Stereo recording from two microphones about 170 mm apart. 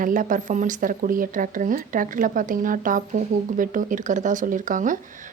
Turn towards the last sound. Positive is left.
turn(degrees=-50)  # may be behind; listen again after turning